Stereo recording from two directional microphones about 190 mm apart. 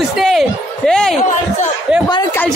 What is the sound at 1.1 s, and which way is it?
Speech, 40° left (ahead or behind).